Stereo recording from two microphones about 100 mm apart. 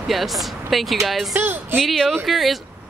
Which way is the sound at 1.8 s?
5° left (ahead or behind).